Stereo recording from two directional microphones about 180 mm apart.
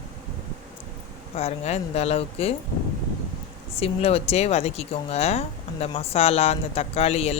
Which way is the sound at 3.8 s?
35° left (ahead or behind).